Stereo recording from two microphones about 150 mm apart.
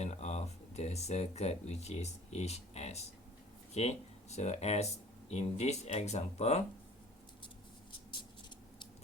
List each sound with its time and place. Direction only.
0.0 s speech: 45° left (ahead or behind)